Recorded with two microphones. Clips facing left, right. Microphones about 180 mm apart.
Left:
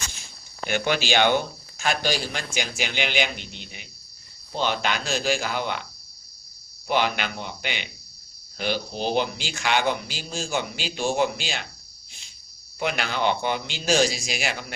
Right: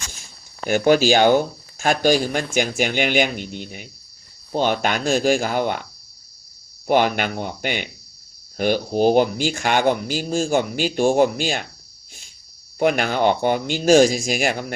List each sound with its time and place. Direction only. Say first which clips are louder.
0.7 s speech: right 9 dB; 40° right (ahead or behind)
6.8 s speech: right 6 dB; 50° right (ahead or behind)
12.8 s speech: right 7 dB; 50° right (ahead or behind)